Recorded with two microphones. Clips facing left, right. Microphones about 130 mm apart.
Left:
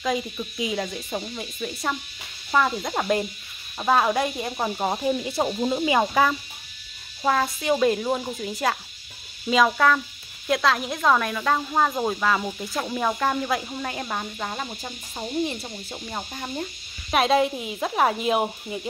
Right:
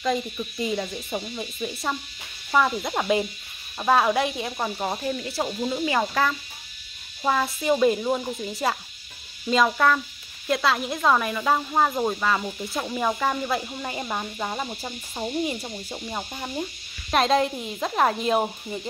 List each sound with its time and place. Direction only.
0.0 s speech: centre (ahead or behind)
4.7 s insect: 15° left (ahead or behind)
7.2 s speech: 5° right (ahead or behind)